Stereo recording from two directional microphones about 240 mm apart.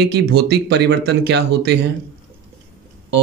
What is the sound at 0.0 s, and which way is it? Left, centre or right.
Speech, right.